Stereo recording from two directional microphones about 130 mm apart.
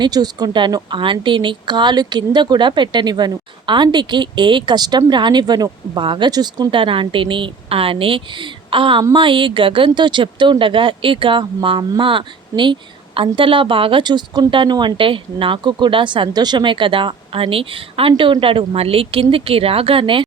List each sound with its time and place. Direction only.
0.0 s speech: 30° right (ahead or behind)